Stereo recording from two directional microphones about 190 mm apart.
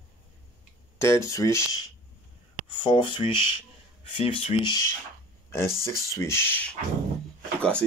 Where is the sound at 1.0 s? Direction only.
15° left (ahead or behind).